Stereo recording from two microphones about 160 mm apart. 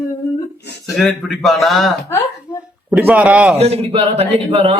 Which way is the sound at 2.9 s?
10° right (ahead or behind).